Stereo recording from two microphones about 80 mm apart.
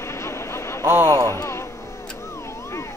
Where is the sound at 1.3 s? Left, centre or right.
Left.